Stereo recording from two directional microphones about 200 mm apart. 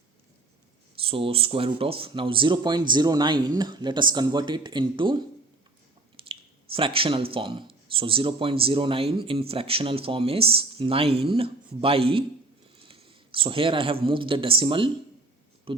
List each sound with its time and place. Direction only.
0.9 s speech: 25° right (ahead or behind)
6.2 s a sound: 25° right (ahead or behind)
7.3 s speech: 25° right (ahead or behind)